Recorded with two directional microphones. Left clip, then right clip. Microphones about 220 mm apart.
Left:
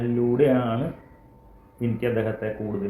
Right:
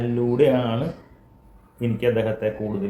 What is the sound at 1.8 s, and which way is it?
Speech, 10° right (ahead or behind).